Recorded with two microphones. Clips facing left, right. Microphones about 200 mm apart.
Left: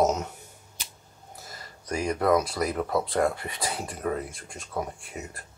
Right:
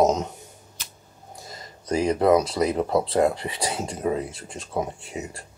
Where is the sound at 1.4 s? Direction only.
20° right (ahead or behind).